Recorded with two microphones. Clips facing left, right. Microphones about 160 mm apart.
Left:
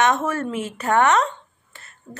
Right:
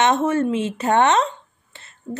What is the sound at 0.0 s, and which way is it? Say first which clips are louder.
A woman's voice: right 3 dB; 25° right (ahead or behind).